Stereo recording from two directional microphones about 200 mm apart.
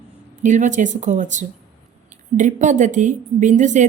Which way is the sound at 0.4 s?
40° right (ahead or behind).